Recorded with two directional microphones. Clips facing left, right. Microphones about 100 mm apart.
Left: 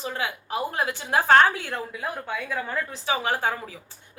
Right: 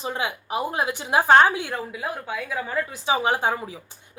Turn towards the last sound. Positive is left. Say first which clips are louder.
# right 3 dB
turn(degrees=-20)  # may be behind; listen again after turning